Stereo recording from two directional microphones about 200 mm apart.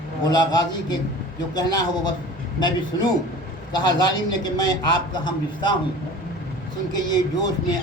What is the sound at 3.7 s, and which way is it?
A man's voice, 20° left (ahead or behind).